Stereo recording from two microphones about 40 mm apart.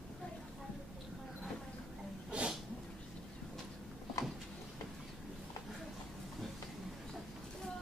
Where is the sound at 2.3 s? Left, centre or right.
Right.